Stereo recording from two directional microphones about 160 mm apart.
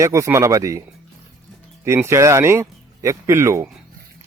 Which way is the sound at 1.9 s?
15° right (ahead or behind).